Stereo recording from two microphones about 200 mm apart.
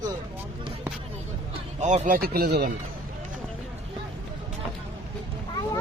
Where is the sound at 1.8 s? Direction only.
35° right (ahead or behind).